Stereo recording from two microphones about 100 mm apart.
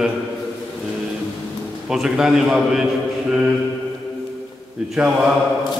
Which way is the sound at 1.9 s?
5° right (ahead or behind).